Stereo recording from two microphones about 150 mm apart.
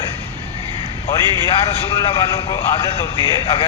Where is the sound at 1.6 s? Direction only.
35° left (ahead or behind).